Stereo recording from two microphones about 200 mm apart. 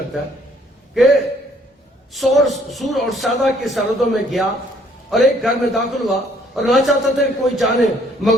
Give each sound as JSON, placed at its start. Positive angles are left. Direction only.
{"t": 0.9, "sound": "a man's voice", "side_deg": 0}